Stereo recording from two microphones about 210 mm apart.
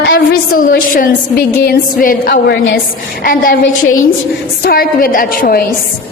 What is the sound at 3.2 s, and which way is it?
A woman's voice, 45° left (ahead or behind).